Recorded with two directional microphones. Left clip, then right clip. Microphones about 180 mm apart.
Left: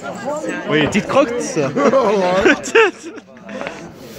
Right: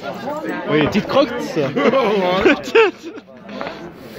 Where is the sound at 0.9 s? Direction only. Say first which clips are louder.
Left 1 dB; 5° left (ahead or behind).